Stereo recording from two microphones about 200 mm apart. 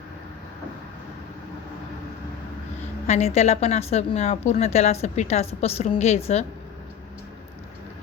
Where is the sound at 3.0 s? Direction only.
35° left (ahead or behind).